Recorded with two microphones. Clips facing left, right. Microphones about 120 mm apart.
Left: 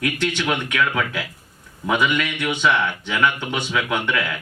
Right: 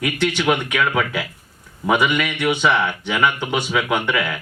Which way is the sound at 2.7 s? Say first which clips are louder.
Even; 30° right (ahead or behind).